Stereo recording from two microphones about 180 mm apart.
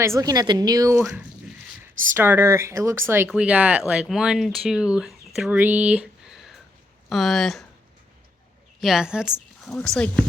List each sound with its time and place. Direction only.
0.0 s a woman's voice: 15° right (ahead or behind)
2.1 s a woman's voice: 10° right (ahead or behind)
8.8 s a woman's voice: centre (ahead or behind)